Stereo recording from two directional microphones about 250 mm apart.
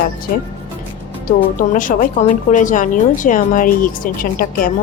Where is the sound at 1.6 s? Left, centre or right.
Left.